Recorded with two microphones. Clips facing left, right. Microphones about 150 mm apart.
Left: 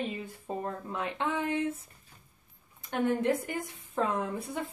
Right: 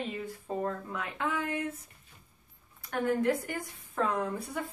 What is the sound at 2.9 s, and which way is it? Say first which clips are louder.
Speech: even; 20° left (ahead or behind).